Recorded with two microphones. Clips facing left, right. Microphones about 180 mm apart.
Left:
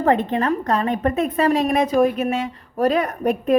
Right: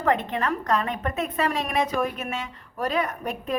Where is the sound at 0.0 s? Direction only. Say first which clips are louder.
Left 6 dB; 35° left (ahead or behind).